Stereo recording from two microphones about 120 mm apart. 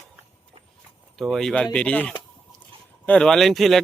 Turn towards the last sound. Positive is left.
turn(degrees=0)  # may be behind; listen again after turning